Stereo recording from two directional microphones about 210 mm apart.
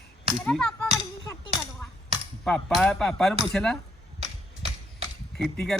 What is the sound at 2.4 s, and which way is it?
Speech, centre (ahead or behind).